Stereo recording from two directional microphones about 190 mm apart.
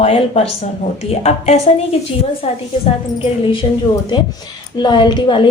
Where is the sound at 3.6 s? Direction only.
30° left (ahead or behind).